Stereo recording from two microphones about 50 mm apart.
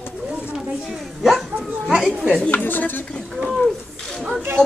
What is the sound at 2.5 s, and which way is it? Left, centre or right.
Speech, left.